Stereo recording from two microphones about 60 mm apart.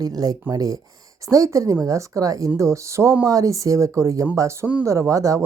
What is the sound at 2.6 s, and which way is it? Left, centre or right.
Speech, right.